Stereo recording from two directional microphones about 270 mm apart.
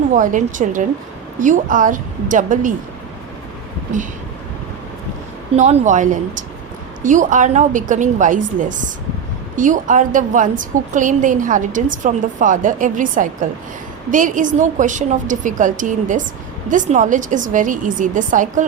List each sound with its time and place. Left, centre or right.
0.1 s a woman's voice: right
5.5 s a woman's voice: right